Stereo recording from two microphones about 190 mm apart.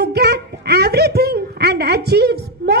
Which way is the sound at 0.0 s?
60° right (ahead or behind).